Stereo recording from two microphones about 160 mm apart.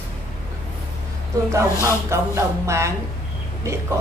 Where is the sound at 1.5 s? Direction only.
20° right (ahead or behind).